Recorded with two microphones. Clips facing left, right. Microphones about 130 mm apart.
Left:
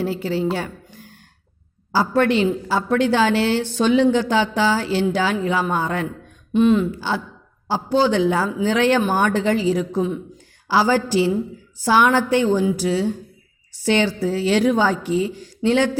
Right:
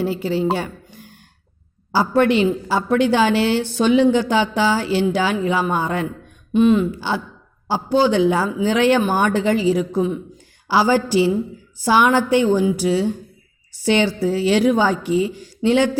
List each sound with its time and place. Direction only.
0.0 s a woman's voice: 15° right (ahead or behind)
6.5 s a woman's voice: 5° right (ahead or behind)